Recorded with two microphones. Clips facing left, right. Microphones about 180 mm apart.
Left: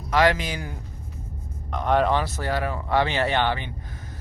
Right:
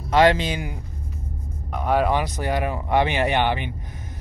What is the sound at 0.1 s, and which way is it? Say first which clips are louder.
Speech: right 4 dB; 25° right (ahead or behind).